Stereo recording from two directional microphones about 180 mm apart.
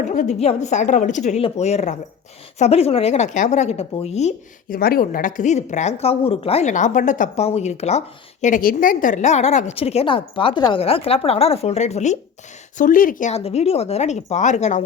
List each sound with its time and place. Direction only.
0.0 s speech: 45° left (ahead or behind)
4.8 s speech: 55° left (ahead or behind)